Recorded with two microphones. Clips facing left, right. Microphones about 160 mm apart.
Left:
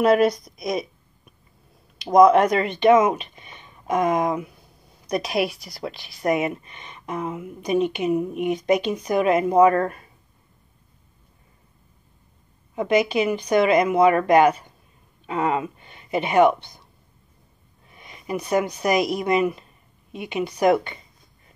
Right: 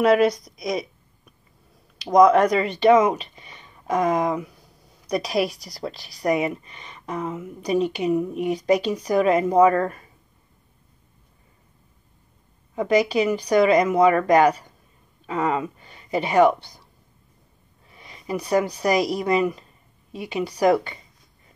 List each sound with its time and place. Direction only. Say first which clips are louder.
0.0 s a woman's voice: even; 30° left (ahead or behind)
2.0 s a woman's voice: left 1 dB; 30° left (ahead or behind)
2.6 s speech: even; 35° right (ahead or behind)
4.2 s a woman's voice: even; 20° left (ahead or behind)
5.0 s speech: even; 35° right (ahead or behind)
7.2 s speech: even; 15° left (ahead or behind)
7.6 s speech: even; 35° right (ahead or behind)
8.1 s speech: even; 15° left (ahead or behind)
8.4 s speech: even; 35° right (ahead or behind)
12.8 s speech: right 1 dB; 35° right (ahead or behind)
17.8 s speech: even; 30° right (ahead or behind)